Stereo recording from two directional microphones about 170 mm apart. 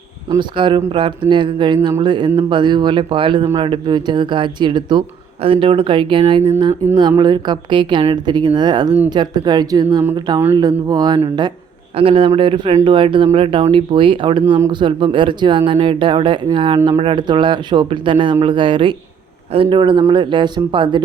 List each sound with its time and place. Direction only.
0.3 s speech: 25° right (ahead or behind)